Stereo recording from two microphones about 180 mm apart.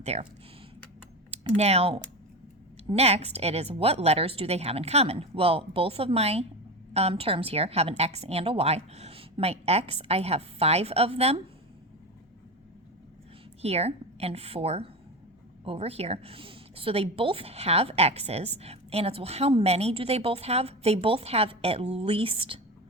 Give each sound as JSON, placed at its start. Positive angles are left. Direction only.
{"t": 0.0, "sound": "speech", "side_deg": -35}
{"t": 1.3, "sound": "a woman's voice", "side_deg": -35}
{"t": 13.6, "sound": "a woman's voice", "side_deg": -35}